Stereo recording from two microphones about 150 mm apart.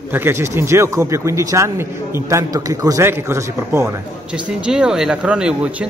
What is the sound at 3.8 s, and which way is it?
A man's voice, 5° right (ahead or behind).